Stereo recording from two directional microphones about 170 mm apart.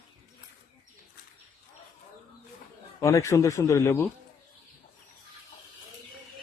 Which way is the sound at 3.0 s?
20° left (ahead or behind).